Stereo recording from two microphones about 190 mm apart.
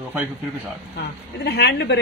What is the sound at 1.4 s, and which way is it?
Speech, 60° left (ahead or behind).